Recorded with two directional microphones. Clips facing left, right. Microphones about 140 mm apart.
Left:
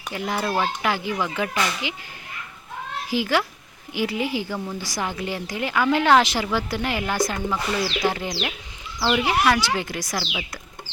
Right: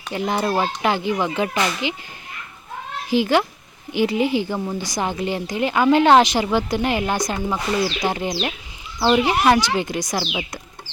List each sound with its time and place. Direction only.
0.1 s a woman's voice: 25° right (ahead or behind)
3.1 s a woman's voice: 25° right (ahead or behind)